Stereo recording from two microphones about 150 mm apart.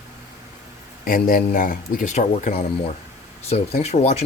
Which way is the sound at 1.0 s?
70° left (ahead or behind).